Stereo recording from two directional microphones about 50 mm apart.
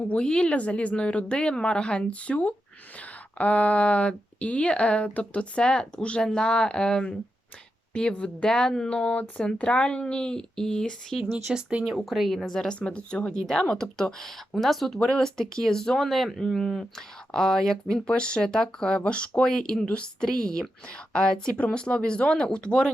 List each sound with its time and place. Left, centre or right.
0.2 s speech: centre
11.5 s speech: right
11.9 s speech: centre